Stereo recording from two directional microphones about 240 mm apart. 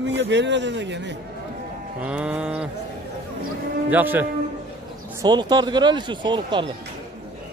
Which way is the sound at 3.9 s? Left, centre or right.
Centre.